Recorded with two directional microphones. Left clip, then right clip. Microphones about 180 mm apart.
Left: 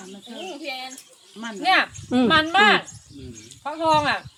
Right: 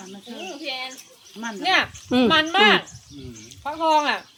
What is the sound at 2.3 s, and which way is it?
Speech, 10° right (ahead or behind).